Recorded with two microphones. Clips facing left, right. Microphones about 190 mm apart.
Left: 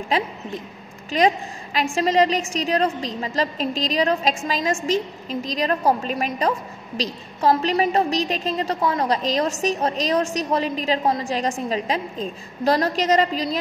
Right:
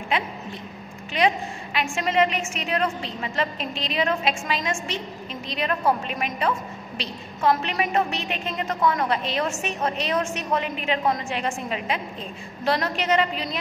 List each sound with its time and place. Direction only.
1.1 s a woman's voice: 40° left (ahead or behind)